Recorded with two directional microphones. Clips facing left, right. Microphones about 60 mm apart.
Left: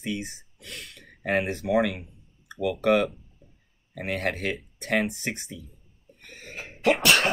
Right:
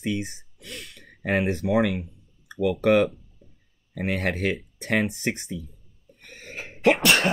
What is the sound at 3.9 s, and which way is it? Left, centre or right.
Speech, centre.